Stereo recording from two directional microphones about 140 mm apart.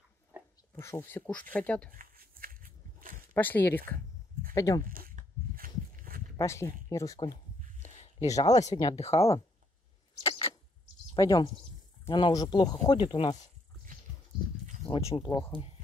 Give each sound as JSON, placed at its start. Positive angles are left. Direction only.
{"t": 0.3, "sound": "a sound", "side_deg": -10}
{"t": 0.7, "sound": "speech", "side_deg": 15}
{"t": 1.9, "sound": "a sound", "side_deg": -85}
{"t": 3.3, "sound": "speech", "side_deg": 15}
{"t": 4.6, "sound": "speech", "side_deg": 25}
{"t": 4.8, "sound": "walk", "side_deg": -85}
{"t": 6.3, "sound": "speech", "side_deg": 20}
{"t": 8.9, "sound": "speech", "side_deg": 50}
{"t": 11.1, "sound": "speech", "side_deg": 25}
{"t": 15.0, "sound": "speech", "side_deg": 25}